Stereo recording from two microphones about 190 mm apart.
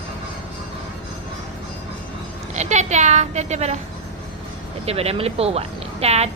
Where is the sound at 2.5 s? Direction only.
35° right (ahead or behind).